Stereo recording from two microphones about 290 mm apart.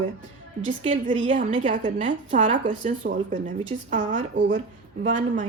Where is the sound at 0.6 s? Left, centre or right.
Right.